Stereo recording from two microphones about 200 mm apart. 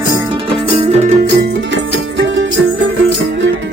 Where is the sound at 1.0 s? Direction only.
50° right (ahead or behind).